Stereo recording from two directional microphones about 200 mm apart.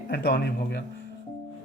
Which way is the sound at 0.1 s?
50° left (ahead or behind).